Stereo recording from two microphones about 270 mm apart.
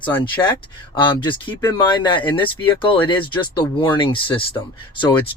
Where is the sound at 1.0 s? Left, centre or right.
Centre.